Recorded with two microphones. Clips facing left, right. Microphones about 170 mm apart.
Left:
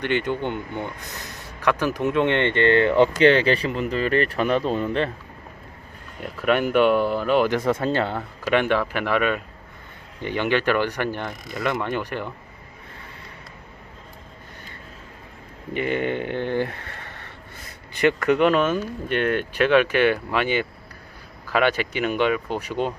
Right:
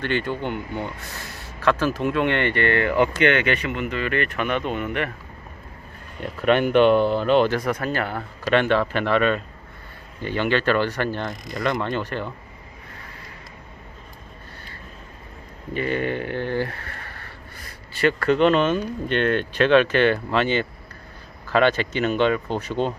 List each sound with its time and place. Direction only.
0.0 s speech: 20° left (ahead or behind)
6.4 s speech: 5° left (ahead or behind)
6.9 s speech: 25° right (ahead or behind)
7.3 s speech: 5° left (ahead or behind)
7.5 s speech: 25° left (ahead or behind)
8.4 s speech: 10° left (ahead or behind)
15.7 s speech: 20° left (ahead or behind)